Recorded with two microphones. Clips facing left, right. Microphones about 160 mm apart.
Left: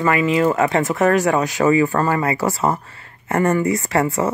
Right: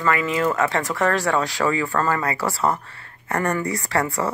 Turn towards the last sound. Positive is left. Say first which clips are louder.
# left 4 dB
turn(degrees=20)  # may be behind; listen again after turning